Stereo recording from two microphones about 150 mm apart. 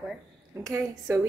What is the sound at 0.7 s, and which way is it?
Speech, 20° right (ahead or behind).